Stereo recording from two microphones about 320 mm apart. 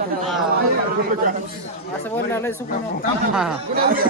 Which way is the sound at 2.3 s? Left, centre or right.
Centre.